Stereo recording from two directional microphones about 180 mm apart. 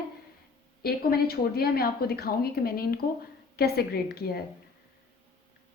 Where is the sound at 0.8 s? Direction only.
60° left (ahead or behind).